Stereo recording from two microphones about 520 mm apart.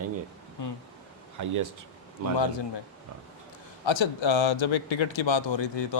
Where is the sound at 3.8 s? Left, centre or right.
Left.